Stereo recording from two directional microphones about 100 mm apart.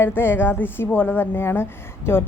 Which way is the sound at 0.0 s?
20° left (ahead or behind).